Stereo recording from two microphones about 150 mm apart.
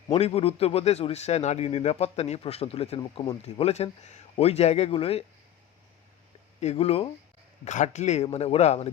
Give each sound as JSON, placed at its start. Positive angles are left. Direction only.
{"t": 0.1, "sound": "a man's voice", "side_deg": 40}
{"t": 6.6, "sound": "speech", "side_deg": 45}
{"t": 7.6, "sound": "a man's voice", "side_deg": 50}